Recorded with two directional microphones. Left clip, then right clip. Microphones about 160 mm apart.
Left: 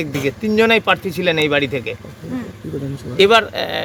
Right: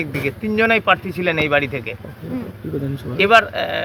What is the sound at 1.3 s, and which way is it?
Speech, 90° left.